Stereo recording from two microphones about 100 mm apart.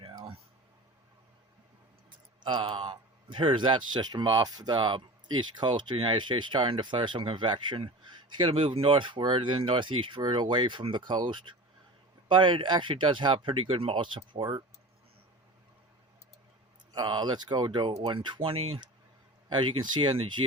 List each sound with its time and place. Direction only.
2.4 s a man's voice: 50° right (ahead or behind)
16.9 s a man's voice: 50° right (ahead or behind); by 18.8 s 70° right (ahead or behind)
19.5 s a man's voice: 55° right (ahead or behind)